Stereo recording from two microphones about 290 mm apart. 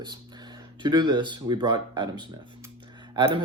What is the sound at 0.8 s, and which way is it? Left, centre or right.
Speech, centre.